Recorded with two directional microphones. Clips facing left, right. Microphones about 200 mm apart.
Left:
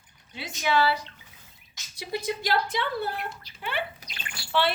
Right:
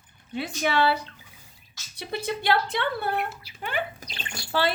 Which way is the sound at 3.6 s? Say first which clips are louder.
Right 2 dB; 45° right (ahead or behind).